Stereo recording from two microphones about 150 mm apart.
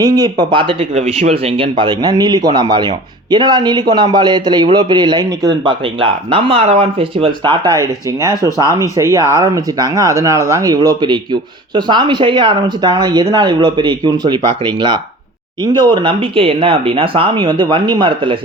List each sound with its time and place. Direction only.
0.0 s speech: 25° right (ahead or behind)
7.7 s speech: 20° right (ahead or behind)